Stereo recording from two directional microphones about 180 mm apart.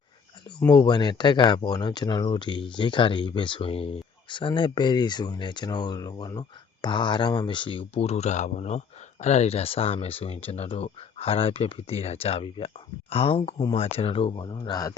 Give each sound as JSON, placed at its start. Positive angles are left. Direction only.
{"t": 0.6, "sound": "speech", "side_deg": 25}